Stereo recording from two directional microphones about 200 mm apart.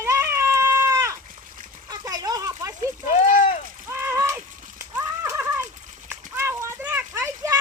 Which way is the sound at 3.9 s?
15° right (ahead or behind).